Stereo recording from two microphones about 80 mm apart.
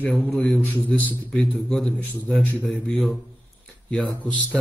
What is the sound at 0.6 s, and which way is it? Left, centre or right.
Speech, centre.